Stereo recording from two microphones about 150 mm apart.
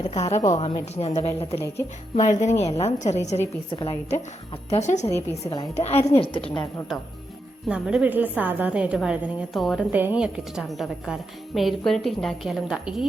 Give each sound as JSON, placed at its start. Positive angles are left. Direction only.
{"t": 0.1, "sound": "a woman's voice", "side_deg": 45}
{"t": 1.5, "sound": "a woman's voice", "side_deg": 15}
{"t": 2.2, "sound": "a woman's voice", "side_deg": 50}
{"t": 4.7, "sound": "a woman's voice", "side_deg": 50}
{"t": 7.7, "sound": "a woman's voice", "side_deg": -5}
{"t": 9.9, "sound": "a woman's voice", "side_deg": -10}